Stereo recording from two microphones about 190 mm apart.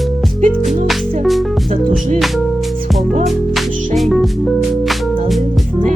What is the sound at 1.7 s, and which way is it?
Music, 40° right (ahead or behind).